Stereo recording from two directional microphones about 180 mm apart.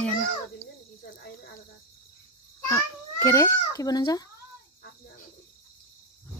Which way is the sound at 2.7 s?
15° left (ahead or behind).